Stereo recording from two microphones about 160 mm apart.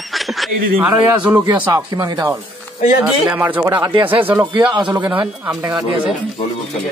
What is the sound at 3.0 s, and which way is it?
Speech, 10° right (ahead or behind).